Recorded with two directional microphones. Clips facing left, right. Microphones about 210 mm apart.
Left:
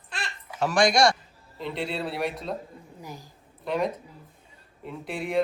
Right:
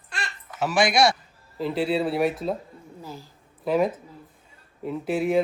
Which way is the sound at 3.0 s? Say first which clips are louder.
Right 2 dB; 15° left (ahead or behind).